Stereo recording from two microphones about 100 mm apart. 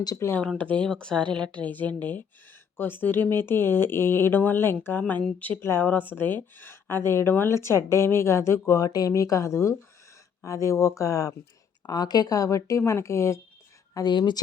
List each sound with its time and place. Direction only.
0.2 s a woman's voice: 25° left (ahead or behind)
0.6 s a woman's voice: 10° left (ahead or behind); by 13.4 s 25° left (ahead or behind)
13.9 s speech: 45° left (ahead or behind)